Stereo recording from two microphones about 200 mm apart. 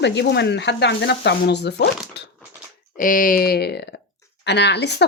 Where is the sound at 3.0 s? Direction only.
45° left (ahead or behind).